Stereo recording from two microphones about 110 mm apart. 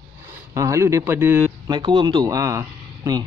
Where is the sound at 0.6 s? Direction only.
30° right (ahead or behind).